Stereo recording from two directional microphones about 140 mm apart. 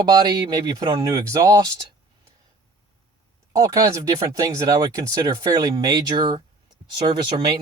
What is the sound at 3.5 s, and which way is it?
Speech, 25° right (ahead or behind).